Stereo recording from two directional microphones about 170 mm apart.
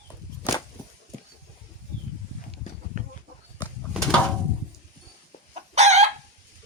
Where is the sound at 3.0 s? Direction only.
45° right (ahead or behind).